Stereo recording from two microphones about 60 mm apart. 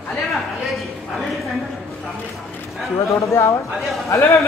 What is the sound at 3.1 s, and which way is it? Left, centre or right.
A man's voice, left.